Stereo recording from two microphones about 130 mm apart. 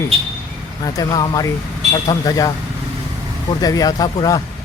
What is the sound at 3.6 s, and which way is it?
Speech, 30° left (ahead or behind).